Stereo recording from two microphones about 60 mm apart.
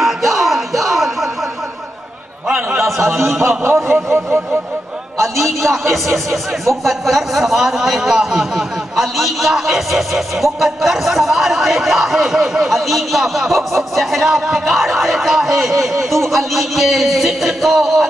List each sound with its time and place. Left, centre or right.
0.0 s music: centre
2.4 s a sound: centre
3.3 s a man's voice: right
5.2 s a man's voice: right
6.0 s speech: centre